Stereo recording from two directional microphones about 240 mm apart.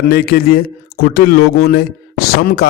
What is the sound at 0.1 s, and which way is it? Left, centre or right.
Speech, left.